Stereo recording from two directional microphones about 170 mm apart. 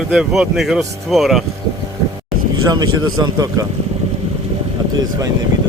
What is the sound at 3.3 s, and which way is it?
Speech, 25° right (ahead or behind).